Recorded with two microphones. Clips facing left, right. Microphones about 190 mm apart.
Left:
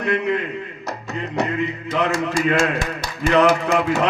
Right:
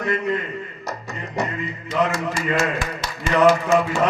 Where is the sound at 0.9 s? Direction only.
65° left (ahead or behind).